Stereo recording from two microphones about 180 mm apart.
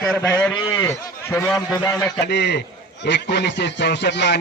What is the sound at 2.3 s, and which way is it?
A man's voice, 70° left (ahead or behind).